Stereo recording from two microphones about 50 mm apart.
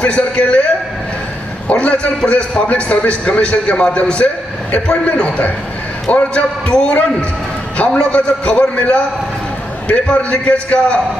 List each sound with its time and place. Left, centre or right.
0.0 s a man's voice: left
1.7 s a man's voice: left